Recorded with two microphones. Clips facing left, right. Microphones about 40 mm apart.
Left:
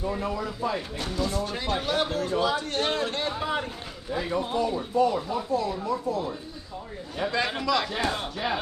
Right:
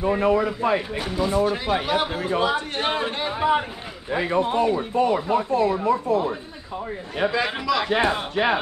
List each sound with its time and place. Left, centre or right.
0.0 s speech: right
0.9 s a man's voice: centre
2.3 s a man's voice: right
4.1 s speech: right
7.2 s speech: centre
8.4 s speech: right